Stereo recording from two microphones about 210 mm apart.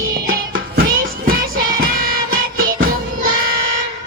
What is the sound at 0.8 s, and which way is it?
Music, 40° right (ahead or behind).